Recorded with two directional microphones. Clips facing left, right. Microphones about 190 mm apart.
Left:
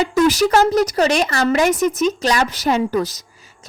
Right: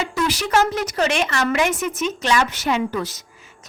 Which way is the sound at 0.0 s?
45° left (ahead or behind).